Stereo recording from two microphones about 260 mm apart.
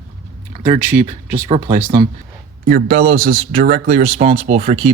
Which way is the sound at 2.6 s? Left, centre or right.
Right.